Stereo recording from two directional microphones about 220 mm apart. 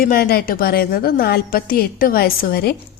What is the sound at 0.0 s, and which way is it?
A woman's voice, 45° left (ahead or behind).